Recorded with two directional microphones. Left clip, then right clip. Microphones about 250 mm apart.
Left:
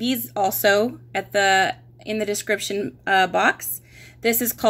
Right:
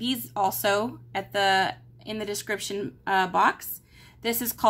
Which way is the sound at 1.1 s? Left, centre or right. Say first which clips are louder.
Left 5 dB; right.